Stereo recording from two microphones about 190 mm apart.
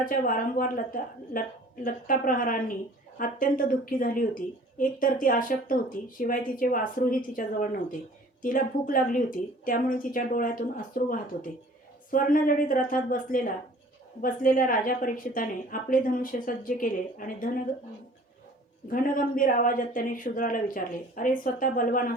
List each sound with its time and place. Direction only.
0.0 s a woman's voice: 45° left (ahead or behind)
18.9 s a woman's voice: 45° left (ahead or behind)